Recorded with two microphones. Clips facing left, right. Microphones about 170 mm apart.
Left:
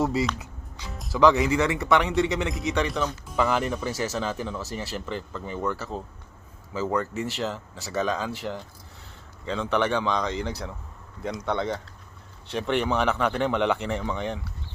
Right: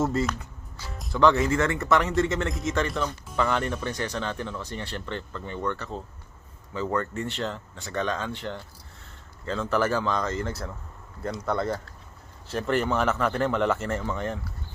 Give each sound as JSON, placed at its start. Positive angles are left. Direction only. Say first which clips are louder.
{"t": 0.0, "sound": "speech", "louder": "left 1 dB", "side_deg": 0}